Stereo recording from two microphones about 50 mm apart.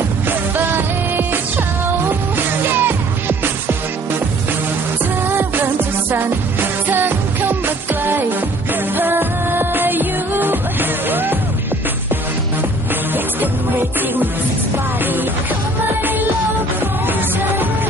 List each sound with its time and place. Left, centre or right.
0.3 s music: right
5.3 s music: right
6.9 s music: right